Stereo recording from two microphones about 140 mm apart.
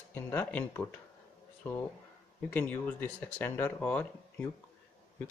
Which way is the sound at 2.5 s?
10° left (ahead or behind).